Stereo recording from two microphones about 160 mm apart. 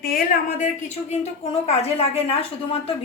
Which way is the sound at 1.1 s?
40° left (ahead or behind).